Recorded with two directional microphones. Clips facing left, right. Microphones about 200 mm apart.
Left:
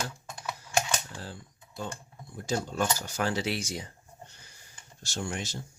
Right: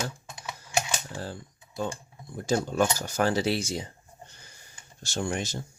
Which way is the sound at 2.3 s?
50° right (ahead or behind).